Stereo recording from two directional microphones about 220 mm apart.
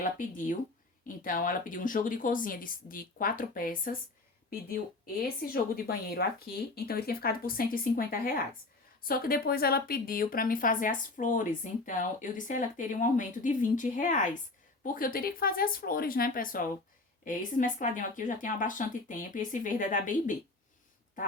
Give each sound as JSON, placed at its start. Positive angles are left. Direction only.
{"t": 0.0, "sound": "a woman's voice", "side_deg": 35}
{"t": 5.4, "sound": "a woman's voice", "side_deg": 40}